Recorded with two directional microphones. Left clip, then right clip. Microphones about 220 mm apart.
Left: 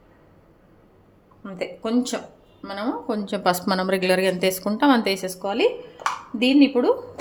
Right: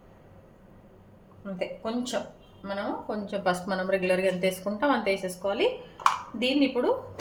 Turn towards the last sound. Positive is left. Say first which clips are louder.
# left 7 dB
turn(degrees=45)  # may be behind; listen again after turning